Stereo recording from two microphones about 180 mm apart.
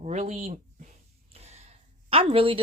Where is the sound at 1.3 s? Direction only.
35° right (ahead or behind).